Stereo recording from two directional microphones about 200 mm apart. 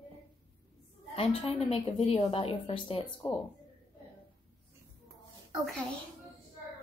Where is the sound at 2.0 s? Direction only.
30° left (ahead or behind).